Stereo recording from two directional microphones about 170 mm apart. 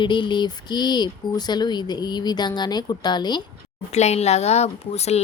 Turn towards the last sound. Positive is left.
turn(degrees=40)  # may be behind; listen again after turning